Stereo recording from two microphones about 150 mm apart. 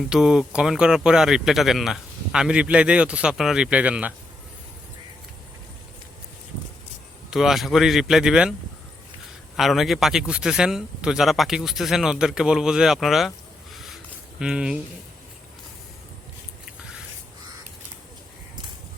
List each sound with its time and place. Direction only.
0.1 s speech: 5° right (ahead or behind)
7.3 s speech: centre (ahead or behind)
9.6 s speech: centre (ahead or behind)
13.7 s a sound: centre (ahead or behind)